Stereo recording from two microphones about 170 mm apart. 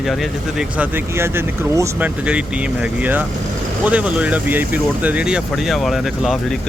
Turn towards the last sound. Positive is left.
turn(degrees=0)  # may be behind; listen again after turning